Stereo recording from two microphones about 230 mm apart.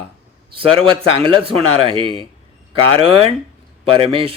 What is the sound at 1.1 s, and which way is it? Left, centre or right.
Speech, right.